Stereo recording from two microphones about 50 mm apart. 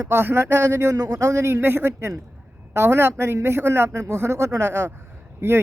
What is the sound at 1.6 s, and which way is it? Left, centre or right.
Speech, right.